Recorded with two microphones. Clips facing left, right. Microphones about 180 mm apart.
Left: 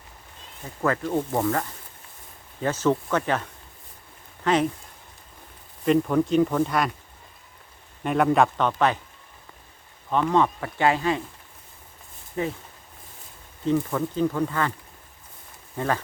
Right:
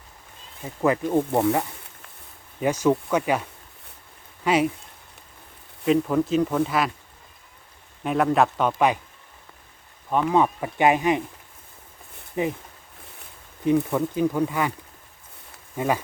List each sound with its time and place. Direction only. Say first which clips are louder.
0.8 s speech: right 3 dB; 15° right (ahead or behind)
2.6 s speech: right 2 dB; 15° right (ahead or behind)
4.4 s speech: right 1 dB; 10° right (ahead or behind)
5.8 s speech: even; centre (ahead or behind)
8.0 s speech: even; centre (ahead or behind)
10.1 s speech: right 1 dB; 10° right (ahead or behind)
12.4 s speech: right 2 dB; 15° right (ahead or behind)
13.7 s speech: right 3 dB; 15° right (ahead or behind)
15.7 s bee: right 2 dB; 10° right (ahead or behind)